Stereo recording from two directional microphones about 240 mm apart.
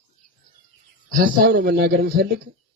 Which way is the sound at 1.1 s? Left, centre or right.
Right.